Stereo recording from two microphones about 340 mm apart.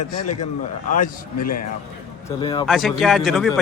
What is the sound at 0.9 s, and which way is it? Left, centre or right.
Speech, left.